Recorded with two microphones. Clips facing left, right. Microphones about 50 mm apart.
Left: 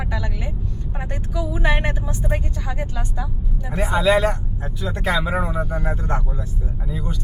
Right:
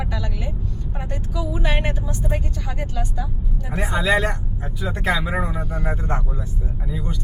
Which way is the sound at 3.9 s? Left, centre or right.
Centre.